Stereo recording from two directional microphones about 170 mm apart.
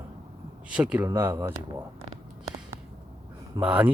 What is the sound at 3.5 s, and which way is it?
Speech, 10° right (ahead or behind).